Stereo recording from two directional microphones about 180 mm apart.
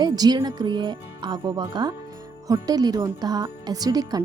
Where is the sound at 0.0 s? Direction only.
25° right (ahead or behind).